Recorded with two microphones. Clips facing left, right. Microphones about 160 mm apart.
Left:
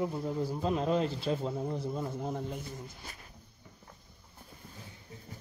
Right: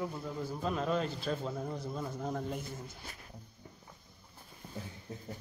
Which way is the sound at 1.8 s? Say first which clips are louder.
Left 3 dB; 10° left (ahead or behind).